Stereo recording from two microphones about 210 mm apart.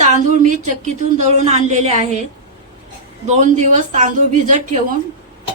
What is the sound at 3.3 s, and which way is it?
Speech, 35° right (ahead or behind).